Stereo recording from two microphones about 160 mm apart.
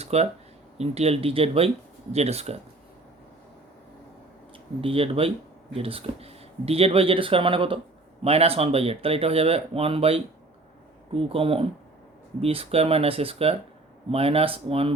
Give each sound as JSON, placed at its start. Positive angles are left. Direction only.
{"t": 0.0, "sound": "a sound", "side_deg": -40}
{"t": 0.8, "sound": "speech", "side_deg": -40}
{"t": 4.8, "sound": "speech", "side_deg": -35}